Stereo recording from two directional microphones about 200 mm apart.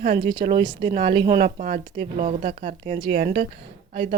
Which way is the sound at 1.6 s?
35° right (ahead or behind).